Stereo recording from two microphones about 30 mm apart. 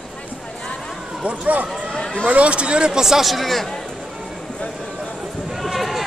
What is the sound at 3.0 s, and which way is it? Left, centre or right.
Speech, centre.